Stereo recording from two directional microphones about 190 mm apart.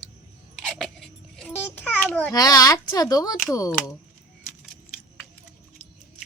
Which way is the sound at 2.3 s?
20° left (ahead or behind).